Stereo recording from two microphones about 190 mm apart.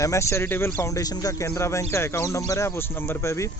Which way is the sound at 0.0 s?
15° left (ahead or behind).